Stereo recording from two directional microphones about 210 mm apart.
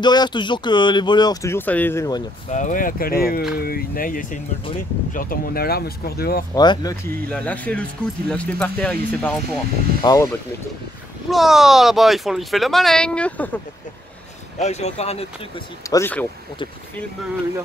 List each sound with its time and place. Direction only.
0.0 s speech: 20° left (ahead or behind)
2.5 s speech: 40° left (ahead or behind)
6.5 s speech: 20° left (ahead or behind)
7.2 s speech: 5° left (ahead or behind)
10.0 s speech: 15° left (ahead or behind)
11.2 s speech: centre (ahead or behind)
14.6 s speech: 30° left (ahead or behind)
15.9 s speech: 10° left (ahead or behind)